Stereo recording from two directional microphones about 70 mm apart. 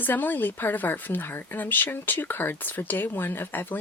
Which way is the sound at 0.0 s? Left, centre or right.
Left.